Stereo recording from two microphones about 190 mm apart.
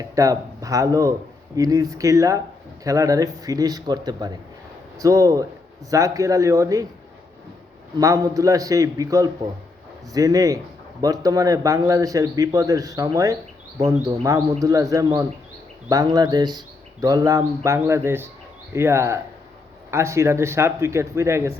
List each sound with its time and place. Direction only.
0.0 s a man's voice: 20° right (ahead or behind)
7.9 s a man's voice: 15° right (ahead or behind)